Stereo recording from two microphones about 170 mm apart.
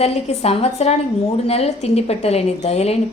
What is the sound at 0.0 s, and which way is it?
Speech, 40° left (ahead or behind).